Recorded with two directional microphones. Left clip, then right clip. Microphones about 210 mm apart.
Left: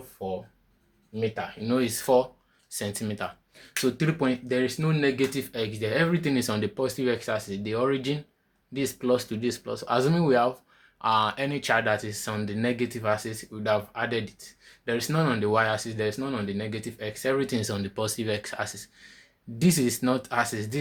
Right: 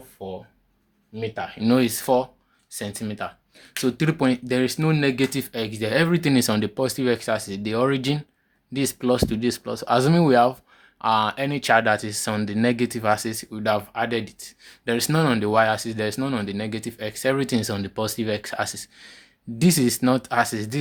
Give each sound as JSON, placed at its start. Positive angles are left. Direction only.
{"t": 0.2, "sound": "speech", "side_deg": -35}
{"t": 1.8, "sound": "speech", "side_deg": -30}
{"t": 2.6, "sound": "speech", "side_deg": -15}
{"t": 3.8, "sound": "speech", "side_deg": -30}